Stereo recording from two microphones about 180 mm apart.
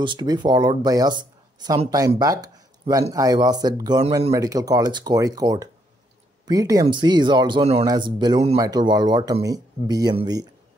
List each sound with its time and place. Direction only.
0.0 s speech: 25° right (ahead or behind)